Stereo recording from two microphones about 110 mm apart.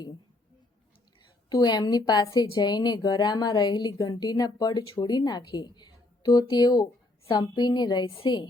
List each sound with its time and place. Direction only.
1.5 s a woman's voice: 40° left (ahead or behind)